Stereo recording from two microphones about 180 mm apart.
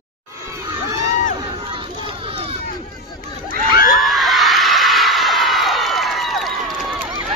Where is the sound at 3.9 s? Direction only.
Centre (ahead or behind).